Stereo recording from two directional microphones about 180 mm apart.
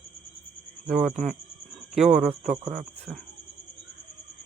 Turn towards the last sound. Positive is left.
turn(degrees=0)  # may be behind; listen again after turning